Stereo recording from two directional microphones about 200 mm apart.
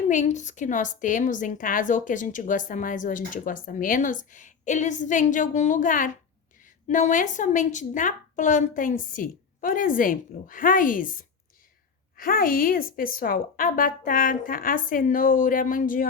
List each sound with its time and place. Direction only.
0.1 s a woman's voice: 40° left (ahead or behind)